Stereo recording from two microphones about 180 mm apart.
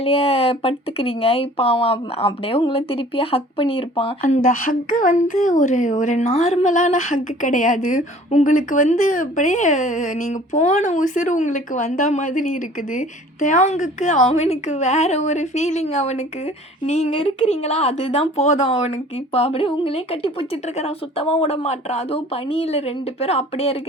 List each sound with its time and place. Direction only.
0.0 s speech: 30° left (ahead or behind)